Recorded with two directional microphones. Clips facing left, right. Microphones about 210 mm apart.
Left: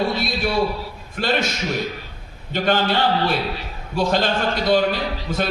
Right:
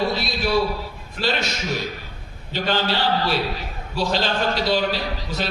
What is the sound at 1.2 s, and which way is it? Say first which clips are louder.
Speech: left 1 dB; 50° left (ahead or behind).